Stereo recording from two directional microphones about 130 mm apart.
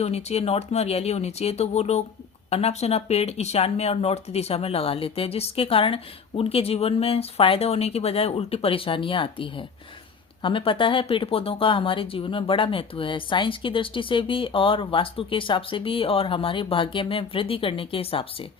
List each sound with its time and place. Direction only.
0.0 s speech: 55° left (ahead or behind)